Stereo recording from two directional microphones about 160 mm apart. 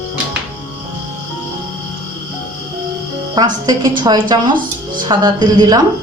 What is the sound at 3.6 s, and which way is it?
A woman's voice, 25° right (ahead or behind).